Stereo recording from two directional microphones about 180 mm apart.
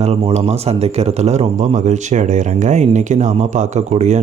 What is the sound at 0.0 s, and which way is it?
Speech, 35° right (ahead or behind).